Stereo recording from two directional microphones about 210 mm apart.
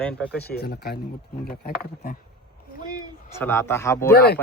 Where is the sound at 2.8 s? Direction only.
20° right (ahead or behind).